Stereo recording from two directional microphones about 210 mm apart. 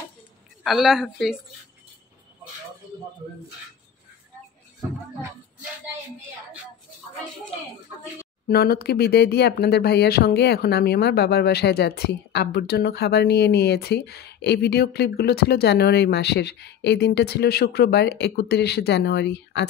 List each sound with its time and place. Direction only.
0.7 s a woman's voice: centre (ahead or behind)
8.5 s speech: 45° left (ahead or behind)